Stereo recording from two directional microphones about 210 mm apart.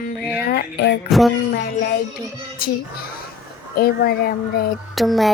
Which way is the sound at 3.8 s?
45° left (ahead or behind).